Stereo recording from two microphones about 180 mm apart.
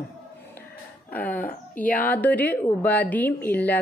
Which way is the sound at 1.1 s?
10° left (ahead or behind).